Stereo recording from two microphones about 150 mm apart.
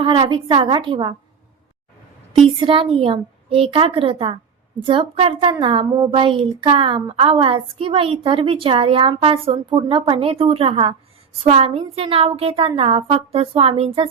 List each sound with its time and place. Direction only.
0.0 s a woman's voice: 35° right (ahead or behind)
2.3 s a woman's voice: 35° right (ahead or behind)